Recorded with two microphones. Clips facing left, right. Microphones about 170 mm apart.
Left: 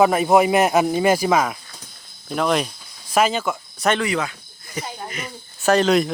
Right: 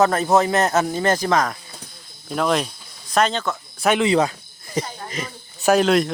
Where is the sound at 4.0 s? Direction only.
30° right (ahead or behind).